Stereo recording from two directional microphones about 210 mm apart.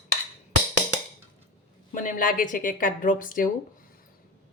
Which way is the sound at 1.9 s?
40° left (ahead or behind).